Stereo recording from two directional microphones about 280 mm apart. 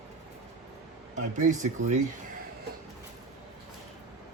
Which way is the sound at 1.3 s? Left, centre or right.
Right.